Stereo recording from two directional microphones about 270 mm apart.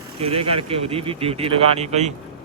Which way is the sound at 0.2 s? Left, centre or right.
Right.